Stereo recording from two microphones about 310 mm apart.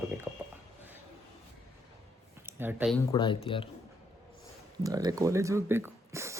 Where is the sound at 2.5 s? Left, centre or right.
Centre.